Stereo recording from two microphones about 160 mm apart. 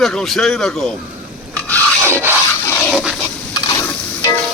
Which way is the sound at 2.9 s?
Centre (ahead or behind).